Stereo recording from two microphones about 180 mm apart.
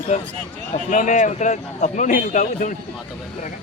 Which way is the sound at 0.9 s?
45° left (ahead or behind).